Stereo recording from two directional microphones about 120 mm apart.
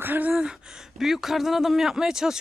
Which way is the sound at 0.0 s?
15° right (ahead or behind).